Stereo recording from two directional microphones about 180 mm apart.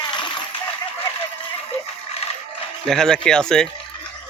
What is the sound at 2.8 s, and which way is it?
Speech, 5° left (ahead or behind).